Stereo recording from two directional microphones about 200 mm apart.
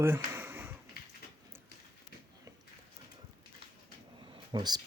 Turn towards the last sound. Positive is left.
turn(degrees=-20)  # may be behind; listen again after turning